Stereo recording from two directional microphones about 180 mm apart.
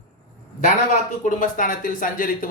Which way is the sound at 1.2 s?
45° left (ahead or behind).